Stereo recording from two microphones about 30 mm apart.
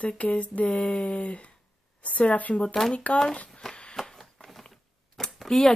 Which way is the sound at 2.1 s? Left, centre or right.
Left.